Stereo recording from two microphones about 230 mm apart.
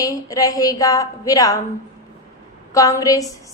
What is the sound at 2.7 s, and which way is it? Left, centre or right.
Speech, centre.